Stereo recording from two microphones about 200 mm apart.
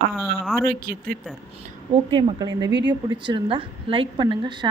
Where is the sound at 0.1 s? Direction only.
Centre (ahead or behind).